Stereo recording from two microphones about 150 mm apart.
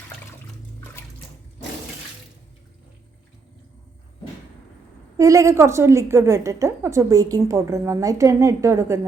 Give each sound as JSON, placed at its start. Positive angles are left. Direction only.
{"t": 5.1, "sound": "a woman's voice", "side_deg": -20}